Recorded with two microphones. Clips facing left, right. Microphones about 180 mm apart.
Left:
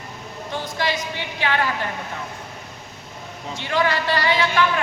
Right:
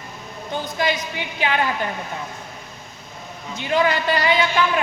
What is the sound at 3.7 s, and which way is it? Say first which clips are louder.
A man's voice: right 2 dB; 20° right (ahead or behind).